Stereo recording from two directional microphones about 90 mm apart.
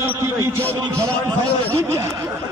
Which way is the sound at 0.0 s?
25° right (ahead or behind).